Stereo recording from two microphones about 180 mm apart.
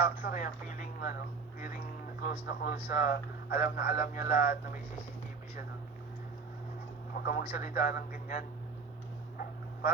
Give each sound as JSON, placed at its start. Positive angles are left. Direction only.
{"t": 0.0, "sound": "speech", "side_deg": 60}
{"t": 2.2, "sound": "speech", "side_deg": 60}
{"t": 7.3, "sound": "speech", "side_deg": 60}